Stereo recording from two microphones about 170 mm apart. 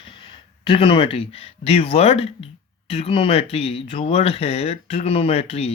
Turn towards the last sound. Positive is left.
turn(degrees=35)  # may be behind; listen again after turning